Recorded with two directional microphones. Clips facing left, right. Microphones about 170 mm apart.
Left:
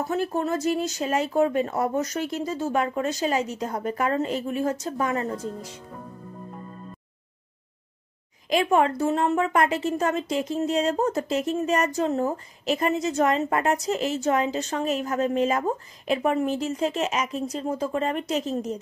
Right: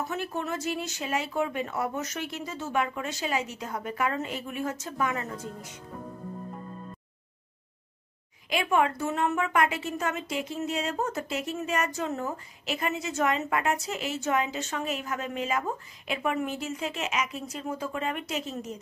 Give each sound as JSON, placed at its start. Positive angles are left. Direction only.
{"t": 0.0, "sound": "speech", "side_deg": 35}
{"t": 8.5, "sound": "speech", "side_deg": 35}